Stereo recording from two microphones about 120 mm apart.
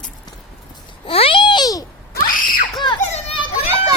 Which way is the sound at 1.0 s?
50° left (ahead or behind).